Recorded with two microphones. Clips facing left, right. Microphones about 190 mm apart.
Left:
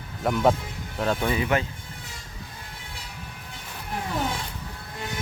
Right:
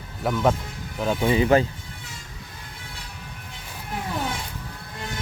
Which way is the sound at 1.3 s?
30° right (ahead or behind).